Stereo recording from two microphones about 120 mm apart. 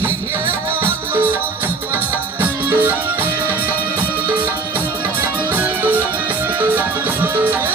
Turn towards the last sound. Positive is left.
turn(degrees=-15)  # may be behind; listen again after turning